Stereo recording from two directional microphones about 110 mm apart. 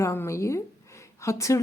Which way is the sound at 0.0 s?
25° left (ahead or behind).